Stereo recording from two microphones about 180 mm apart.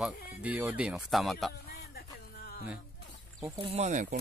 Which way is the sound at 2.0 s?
60° left (ahead or behind).